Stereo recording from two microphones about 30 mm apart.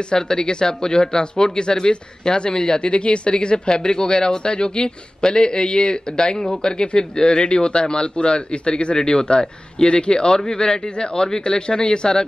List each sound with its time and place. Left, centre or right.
0.1 s speech: left